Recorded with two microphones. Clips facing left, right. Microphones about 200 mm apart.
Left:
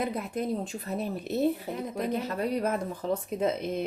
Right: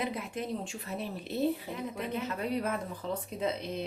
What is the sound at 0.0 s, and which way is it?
A woman's voice, 40° left (ahead or behind).